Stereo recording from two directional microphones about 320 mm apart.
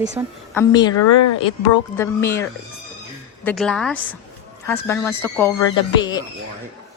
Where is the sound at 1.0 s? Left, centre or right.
Left.